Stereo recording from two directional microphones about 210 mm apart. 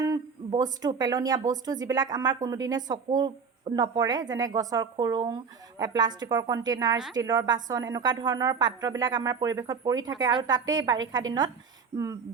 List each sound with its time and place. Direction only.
0.0 s speech: 15° right (ahead or behind)